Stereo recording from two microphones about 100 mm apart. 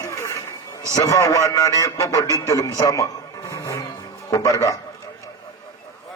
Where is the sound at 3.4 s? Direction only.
35° left (ahead or behind).